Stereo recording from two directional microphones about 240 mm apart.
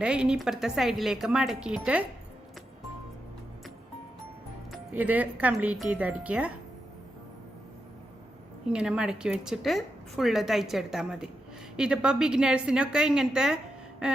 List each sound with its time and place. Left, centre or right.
0.0 s a woman's voice: centre
4.7 s speech: centre
8.7 s a woman's voice: centre
14.0 s a sound: centre